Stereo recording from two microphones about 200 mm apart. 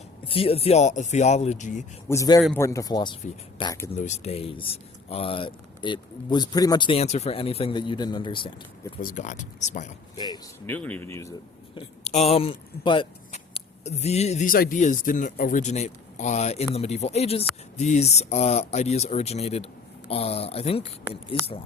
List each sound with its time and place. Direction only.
0.3 s speech: 30° left (ahead or behind)
2.0 s speech: 15° left (ahead or behind)
3.9 s speech: 35° left (ahead or behind)
9.0 s speech: 40° left (ahead or behind)
10.2 s speech: 20° left (ahead or behind)
10.8 s speech: 5° left (ahead or behind)
11.7 s speech: 30° left (ahead or behind)